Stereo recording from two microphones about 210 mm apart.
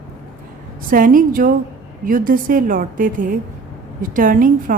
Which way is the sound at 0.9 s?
40° right (ahead or behind).